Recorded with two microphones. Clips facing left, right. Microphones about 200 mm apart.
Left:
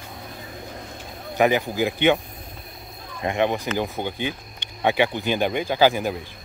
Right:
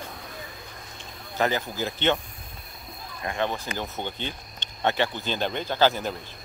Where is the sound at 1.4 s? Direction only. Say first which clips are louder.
Left 6 dB; 15° left (ahead or behind).